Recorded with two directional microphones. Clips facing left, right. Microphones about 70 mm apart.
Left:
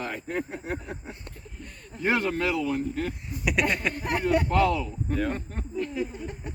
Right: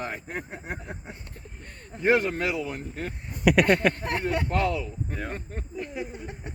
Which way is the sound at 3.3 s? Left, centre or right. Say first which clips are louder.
Right 7 dB; right.